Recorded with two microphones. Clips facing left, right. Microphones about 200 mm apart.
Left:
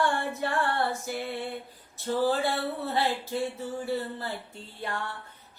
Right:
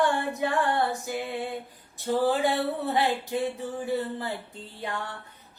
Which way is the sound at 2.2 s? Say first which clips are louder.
Right 2 dB; 15° right (ahead or behind).